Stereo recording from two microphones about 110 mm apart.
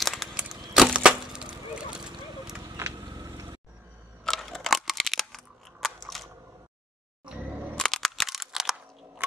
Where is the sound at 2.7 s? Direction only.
30° right (ahead or behind).